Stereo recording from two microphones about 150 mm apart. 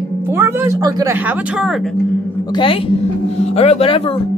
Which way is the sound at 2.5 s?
35° left (ahead or behind).